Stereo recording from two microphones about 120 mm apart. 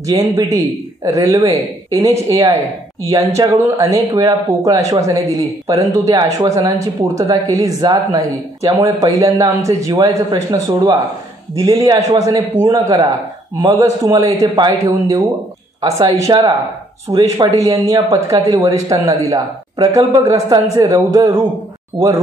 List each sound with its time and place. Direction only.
0.0 s speech: 30° right (ahead or behind)